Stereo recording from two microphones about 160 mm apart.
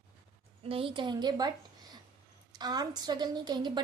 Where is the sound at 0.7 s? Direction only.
35° right (ahead or behind).